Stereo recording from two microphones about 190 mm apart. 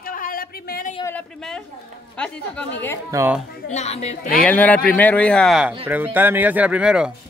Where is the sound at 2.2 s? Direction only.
5° left (ahead or behind).